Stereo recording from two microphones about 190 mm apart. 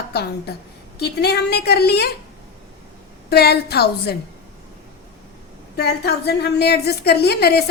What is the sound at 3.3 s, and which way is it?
Speech, 55° left (ahead or behind).